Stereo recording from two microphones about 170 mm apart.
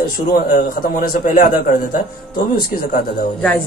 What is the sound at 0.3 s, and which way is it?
A man's voice, 60° left (ahead or behind).